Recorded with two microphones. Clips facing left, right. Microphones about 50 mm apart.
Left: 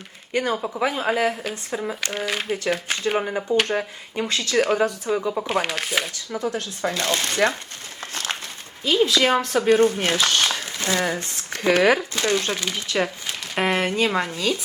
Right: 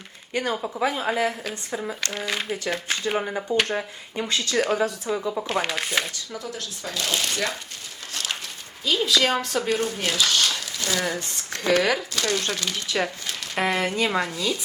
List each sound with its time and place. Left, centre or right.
0.3 s speech: centre
6.4 s speech: left
8.1 s a sound: left
8.8 s speech: centre
9.6 s speech: left